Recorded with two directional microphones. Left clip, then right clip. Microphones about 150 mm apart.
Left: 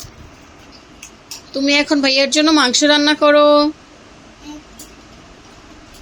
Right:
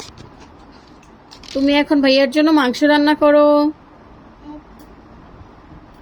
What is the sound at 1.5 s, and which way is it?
Speech, 5° right (ahead or behind).